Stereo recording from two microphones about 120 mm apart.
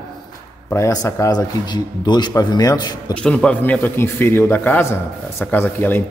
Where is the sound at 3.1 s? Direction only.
10° left (ahead or behind).